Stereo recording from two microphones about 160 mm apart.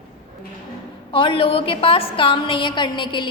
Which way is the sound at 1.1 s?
30° left (ahead or behind).